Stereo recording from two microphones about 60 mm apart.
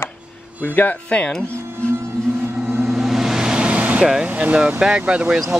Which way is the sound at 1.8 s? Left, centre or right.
Centre.